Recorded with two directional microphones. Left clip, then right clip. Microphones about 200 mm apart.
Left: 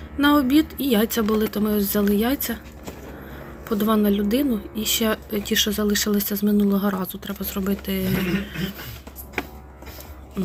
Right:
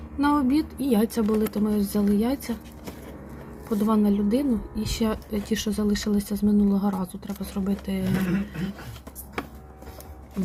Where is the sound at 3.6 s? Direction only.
Centre (ahead or behind).